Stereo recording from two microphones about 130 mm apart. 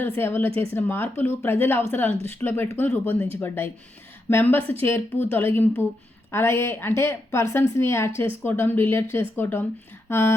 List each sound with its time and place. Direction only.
0.0 s a woman's voice: 15° left (ahead or behind)